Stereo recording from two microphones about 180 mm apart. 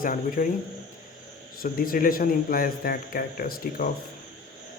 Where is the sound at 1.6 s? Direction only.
55° left (ahead or behind).